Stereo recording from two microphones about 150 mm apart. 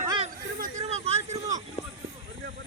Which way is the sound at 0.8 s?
45° right (ahead or behind).